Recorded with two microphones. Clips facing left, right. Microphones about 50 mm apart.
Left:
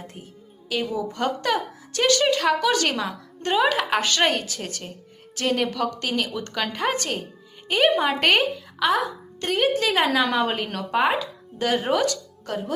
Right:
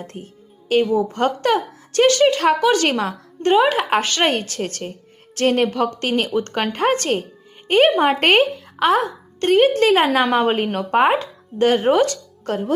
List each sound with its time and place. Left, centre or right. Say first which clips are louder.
0.7 s a woman's voice: right 9 dB; right